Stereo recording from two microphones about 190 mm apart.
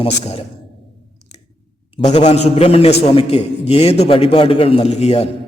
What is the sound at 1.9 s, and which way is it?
A man's voice, 35° left (ahead or behind).